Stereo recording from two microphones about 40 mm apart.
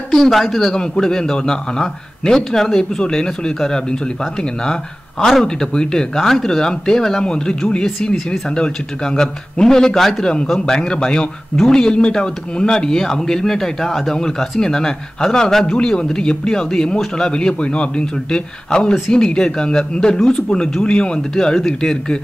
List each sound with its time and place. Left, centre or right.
0.1 s speech: centre
5.4 s a man's voice: centre
10.2 s a man's voice: left